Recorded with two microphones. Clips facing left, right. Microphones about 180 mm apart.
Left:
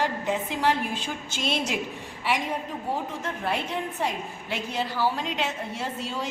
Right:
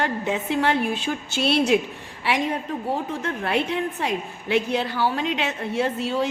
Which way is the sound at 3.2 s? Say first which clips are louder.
Right 5 dB; 65° right (ahead or behind).